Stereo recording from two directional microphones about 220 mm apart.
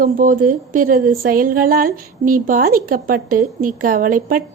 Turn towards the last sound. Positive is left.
turn(degrees=-40)  # may be behind; listen again after turning